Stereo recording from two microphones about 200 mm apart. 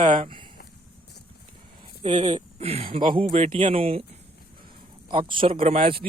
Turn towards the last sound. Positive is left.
turn(degrees=-30)  # may be behind; listen again after turning